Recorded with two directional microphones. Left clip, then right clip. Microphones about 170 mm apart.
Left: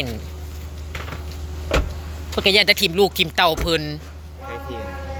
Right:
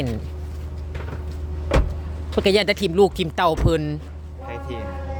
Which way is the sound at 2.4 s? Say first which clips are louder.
Left 3 dB; 35° right (ahead or behind).